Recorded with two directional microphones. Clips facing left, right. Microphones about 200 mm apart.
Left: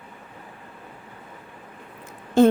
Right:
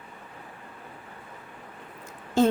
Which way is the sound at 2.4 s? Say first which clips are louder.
Left 6 dB; 55° left (ahead or behind).